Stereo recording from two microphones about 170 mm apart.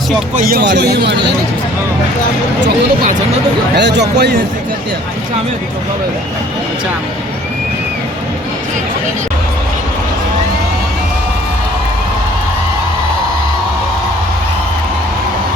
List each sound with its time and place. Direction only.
0.3 s speech: 60° right (ahead or behind); by 1.3 s 90° right
3.8 s a man's voice: 90° right